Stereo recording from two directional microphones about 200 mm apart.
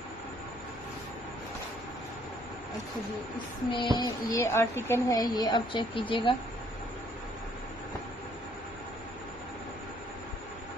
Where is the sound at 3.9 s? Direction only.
20° left (ahead or behind).